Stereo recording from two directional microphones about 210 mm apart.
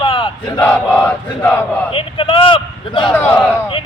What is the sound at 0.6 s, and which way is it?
Battle cry, 10° left (ahead or behind).